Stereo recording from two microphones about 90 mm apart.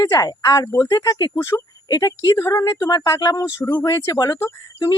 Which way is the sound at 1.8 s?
45° left (ahead or behind).